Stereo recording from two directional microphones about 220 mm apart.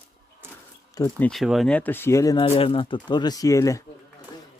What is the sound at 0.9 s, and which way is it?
Speech, 10° left (ahead or behind).